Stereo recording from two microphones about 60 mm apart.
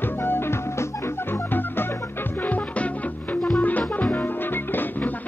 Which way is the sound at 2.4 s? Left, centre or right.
Left.